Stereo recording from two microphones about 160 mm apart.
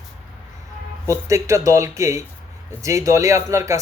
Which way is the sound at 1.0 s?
20° right (ahead or behind).